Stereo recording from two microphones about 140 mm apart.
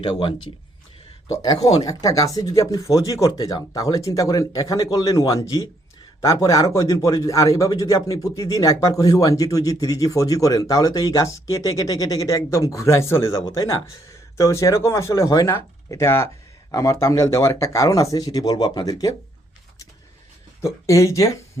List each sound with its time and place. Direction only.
0.0 s speech: 40° left (ahead or behind)
1.3 s a man's voice: 25° left (ahead or behind)
20.6 s a man's voice: 20° left (ahead or behind)